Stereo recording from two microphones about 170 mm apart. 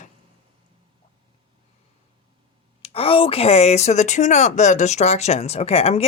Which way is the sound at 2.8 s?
35° left (ahead or behind).